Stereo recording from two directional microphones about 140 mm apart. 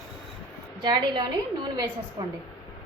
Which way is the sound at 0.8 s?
35° right (ahead or behind).